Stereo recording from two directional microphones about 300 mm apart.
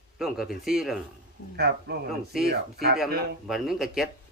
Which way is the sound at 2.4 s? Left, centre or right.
Right.